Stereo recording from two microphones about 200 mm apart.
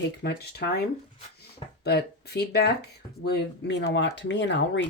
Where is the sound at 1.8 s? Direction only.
55° left (ahead or behind).